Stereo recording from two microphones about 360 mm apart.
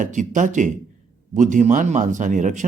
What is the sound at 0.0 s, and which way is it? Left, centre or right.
Speech, right.